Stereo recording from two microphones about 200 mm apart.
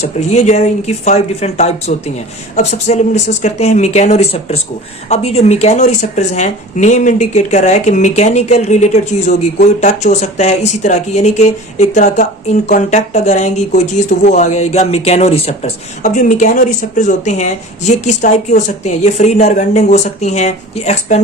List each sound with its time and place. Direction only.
0.0 s speech: 35° left (ahead or behind)